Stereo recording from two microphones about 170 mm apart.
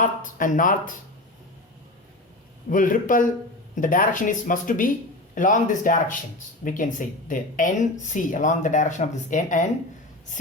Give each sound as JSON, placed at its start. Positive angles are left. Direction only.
{"t": 0.0, "sound": "speech", "side_deg": 50}
{"t": 2.6, "sound": "speech", "side_deg": 50}